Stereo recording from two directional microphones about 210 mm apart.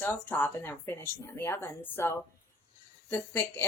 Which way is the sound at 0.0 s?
10° left (ahead or behind).